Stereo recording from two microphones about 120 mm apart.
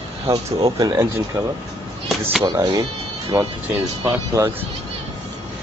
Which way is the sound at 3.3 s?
20° right (ahead or behind).